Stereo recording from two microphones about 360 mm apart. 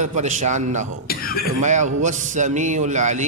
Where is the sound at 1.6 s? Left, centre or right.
Centre.